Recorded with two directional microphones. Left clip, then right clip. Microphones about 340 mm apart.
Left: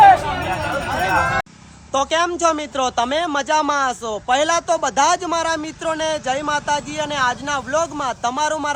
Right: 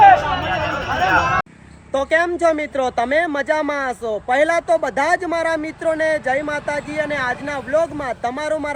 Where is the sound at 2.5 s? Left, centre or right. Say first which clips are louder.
Right 1 dB; centre.